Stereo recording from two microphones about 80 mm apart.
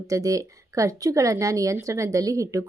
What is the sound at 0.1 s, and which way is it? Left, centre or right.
Speech, right.